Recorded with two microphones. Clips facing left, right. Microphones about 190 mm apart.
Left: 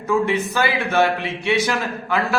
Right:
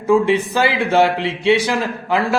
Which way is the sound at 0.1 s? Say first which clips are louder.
Right 5 dB; 30° right (ahead or behind).